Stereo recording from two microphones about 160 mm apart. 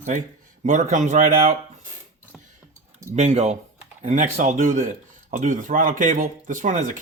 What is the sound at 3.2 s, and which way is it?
Speech, 45° right (ahead or behind).